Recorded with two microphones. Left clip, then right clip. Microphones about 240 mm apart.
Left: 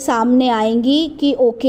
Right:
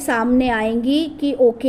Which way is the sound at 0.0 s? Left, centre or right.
Left.